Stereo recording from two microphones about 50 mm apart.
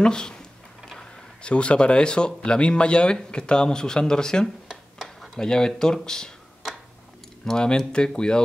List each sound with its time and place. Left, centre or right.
0.0 s speech: centre
7.4 s speech: centre